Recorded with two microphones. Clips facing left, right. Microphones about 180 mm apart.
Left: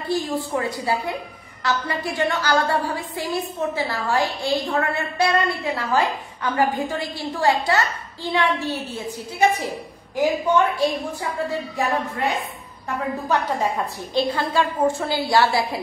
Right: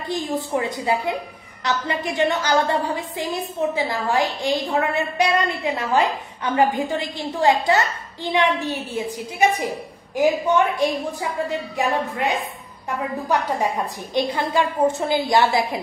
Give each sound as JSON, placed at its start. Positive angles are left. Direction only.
{"t": 0.1, "sound": "a woman's voice", "side_deg": -20}
{"t": 11.7, "sound": "a woman's voice", "side_deg": -15}